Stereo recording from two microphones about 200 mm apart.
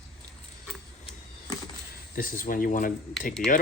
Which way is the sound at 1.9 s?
45° left (ahead or behind).